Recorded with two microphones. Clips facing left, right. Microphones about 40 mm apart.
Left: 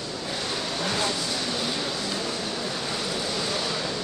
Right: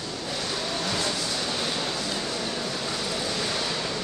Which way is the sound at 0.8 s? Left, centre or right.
Centre.